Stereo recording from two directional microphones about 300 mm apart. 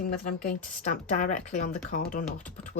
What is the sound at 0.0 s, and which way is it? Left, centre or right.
Speech, left.